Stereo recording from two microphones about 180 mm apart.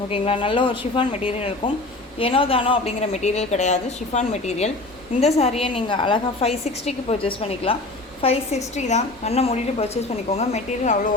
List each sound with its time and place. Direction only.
0.1 s a woman's voice: 30° left (ahead or behind)